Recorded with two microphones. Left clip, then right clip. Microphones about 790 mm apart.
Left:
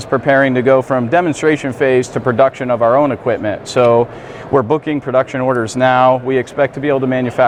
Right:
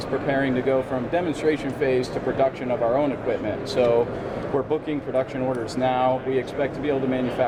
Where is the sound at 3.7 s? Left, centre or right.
Left.